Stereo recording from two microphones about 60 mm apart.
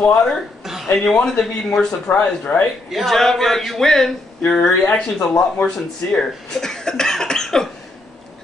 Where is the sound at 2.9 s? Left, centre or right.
Centre.